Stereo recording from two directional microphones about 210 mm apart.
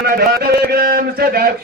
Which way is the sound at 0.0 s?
50° right (ahead or behind).